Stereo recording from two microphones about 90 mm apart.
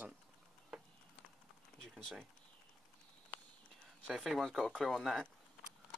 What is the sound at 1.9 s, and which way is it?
Speech, centre (ahead or behind).